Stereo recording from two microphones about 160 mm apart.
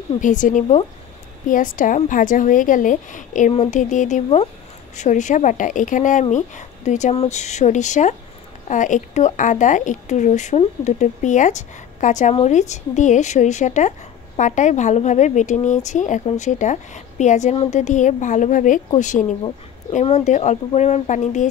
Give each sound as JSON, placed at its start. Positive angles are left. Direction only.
{"t": 0.2, "sound": "speech", "side_deg": 50}